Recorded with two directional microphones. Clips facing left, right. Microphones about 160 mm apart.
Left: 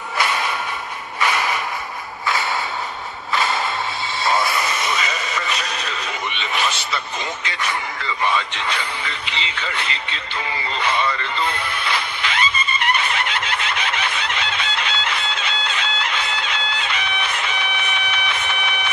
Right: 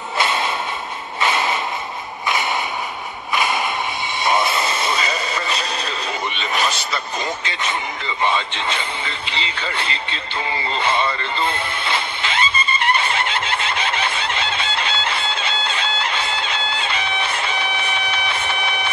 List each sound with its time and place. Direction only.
0.2 s a sound: 25° right (ahead or behind)
1.2 s mechanisms: 25° right (ahead or behind)
4.2 s radio: 20° right (ahead or behind); by 7.0 s 40° right (ahead or behind)
7.4 s speech: 25° right (ahead or behind)
10.8 s music: 30° right (ahead or behind)